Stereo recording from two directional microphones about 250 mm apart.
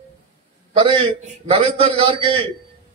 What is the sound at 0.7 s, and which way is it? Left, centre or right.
A man's voice, centre.